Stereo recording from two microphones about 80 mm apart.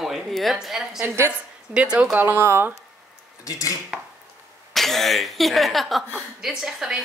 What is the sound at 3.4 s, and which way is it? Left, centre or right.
Speech, left.